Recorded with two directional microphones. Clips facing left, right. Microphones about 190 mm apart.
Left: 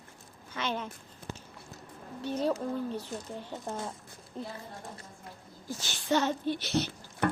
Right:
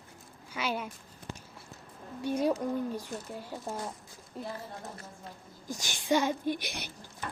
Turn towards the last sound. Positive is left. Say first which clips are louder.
# left 11 dB
turn(degrees=65)  # may be behind; listen again after turning